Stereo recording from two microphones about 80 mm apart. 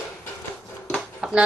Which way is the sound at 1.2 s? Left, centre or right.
Centre.